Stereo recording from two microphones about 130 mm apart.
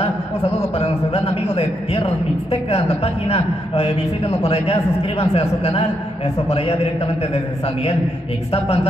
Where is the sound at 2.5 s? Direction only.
50° left (ahead or behind).